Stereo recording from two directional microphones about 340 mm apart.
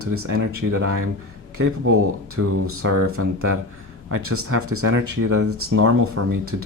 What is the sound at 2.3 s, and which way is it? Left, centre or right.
Speech, right.